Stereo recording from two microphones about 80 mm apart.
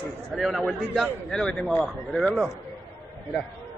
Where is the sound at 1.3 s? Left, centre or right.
Centre.